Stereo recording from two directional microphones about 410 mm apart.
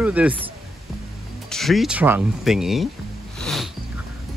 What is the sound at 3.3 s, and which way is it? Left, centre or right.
Music, centre.